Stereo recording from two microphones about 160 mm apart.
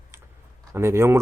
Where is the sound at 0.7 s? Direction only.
15° right (ahead or behind).